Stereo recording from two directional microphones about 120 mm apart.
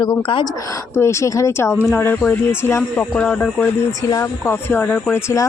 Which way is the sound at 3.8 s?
20° left (ahead or behind).